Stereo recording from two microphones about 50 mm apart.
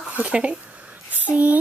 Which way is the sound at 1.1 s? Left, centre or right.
Right.